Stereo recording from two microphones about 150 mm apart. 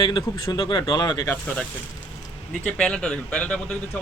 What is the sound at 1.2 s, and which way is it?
Speech, 10° left (ahead or behind).